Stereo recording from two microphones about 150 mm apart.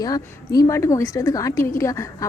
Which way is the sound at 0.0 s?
25° left (ahead or behind).